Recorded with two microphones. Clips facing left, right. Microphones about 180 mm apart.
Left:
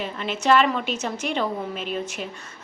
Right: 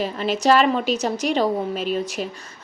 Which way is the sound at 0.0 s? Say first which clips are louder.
Right 5 dB; 35° right (ahead or behind).